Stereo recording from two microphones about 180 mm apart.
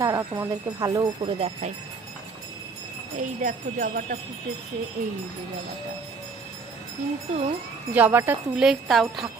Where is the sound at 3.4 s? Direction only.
50° right (ahead or behind).